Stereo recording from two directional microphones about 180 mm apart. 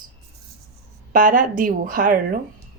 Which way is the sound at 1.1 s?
50° right (ahead or behind).